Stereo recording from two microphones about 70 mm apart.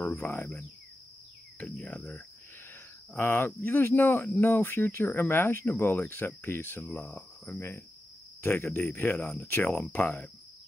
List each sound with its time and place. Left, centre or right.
0.1 s speech: left
3.1 s cricket: left
8.4 s speech: left